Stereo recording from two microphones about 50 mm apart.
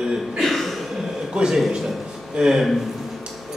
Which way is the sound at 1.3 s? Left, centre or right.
Centre.